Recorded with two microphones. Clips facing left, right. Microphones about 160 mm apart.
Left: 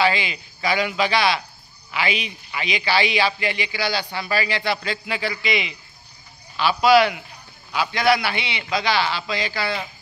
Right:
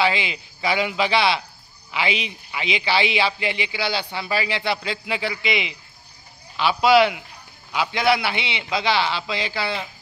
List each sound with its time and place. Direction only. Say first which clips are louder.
0.0 s a man's voice: left 1 dB; 20° right (ahead or behind)